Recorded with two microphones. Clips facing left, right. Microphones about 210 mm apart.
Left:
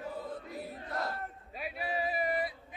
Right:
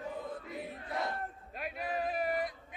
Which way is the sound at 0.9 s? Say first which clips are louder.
Right 1 dB; centre (ahead or behind).